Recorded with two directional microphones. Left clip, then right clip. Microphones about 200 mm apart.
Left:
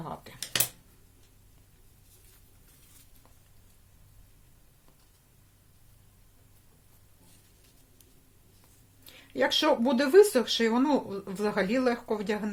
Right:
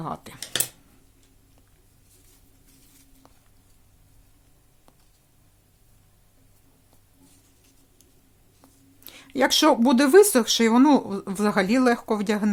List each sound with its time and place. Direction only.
0.0 s speech: 35° right (ahead or behind)
9.0 s speech: 30° right (ahead or behind)